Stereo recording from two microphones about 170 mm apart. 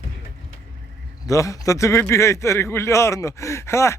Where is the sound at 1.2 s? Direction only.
20° left (ahead or behind).